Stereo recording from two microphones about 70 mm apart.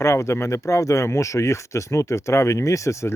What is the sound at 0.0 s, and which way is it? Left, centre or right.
Speech, left.